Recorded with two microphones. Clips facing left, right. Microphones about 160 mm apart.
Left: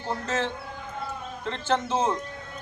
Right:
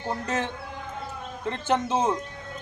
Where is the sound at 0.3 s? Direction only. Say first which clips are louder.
Even; 15° right (ahead or behind).